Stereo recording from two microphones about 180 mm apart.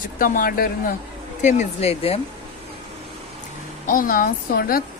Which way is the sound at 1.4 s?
40° left (ahead or behind).